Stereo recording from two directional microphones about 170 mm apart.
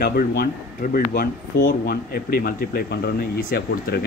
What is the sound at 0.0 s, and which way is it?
Speech, 60° left (ahead or behind).